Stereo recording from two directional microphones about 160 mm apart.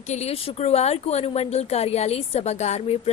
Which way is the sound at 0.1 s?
40° left (ahead or behind).